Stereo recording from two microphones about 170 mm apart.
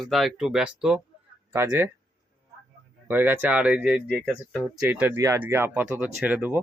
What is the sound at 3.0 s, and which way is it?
Speech, 10° right (ahead or behind).